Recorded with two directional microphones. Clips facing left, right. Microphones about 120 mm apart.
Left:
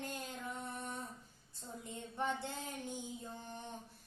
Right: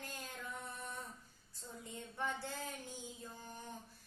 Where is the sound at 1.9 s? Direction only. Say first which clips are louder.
Left 3 dB; 20° left (ahead or behind).